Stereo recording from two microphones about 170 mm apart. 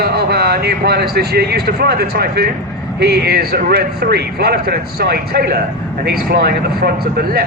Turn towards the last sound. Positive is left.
turn(degrees=-65)  # may be behind; listen again after turning